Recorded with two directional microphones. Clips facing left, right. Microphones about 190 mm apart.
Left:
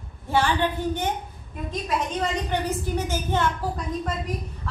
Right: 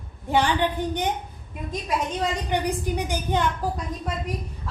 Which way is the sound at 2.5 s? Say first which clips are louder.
Right 1 dB; 15° right (ahead or behind).